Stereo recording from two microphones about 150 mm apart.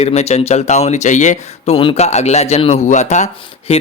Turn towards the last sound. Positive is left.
turn(degrees=50)  # may be behind; listen again after turning